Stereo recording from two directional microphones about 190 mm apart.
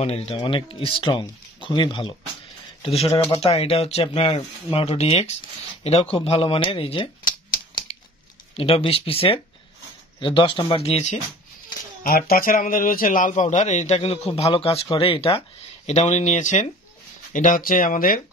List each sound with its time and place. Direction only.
0.0 s speech: 35° left (ahead or behind)
8.5 s speech: 30° left (ahead or behind)
12.0 s speech: 50° left (ahead or behind)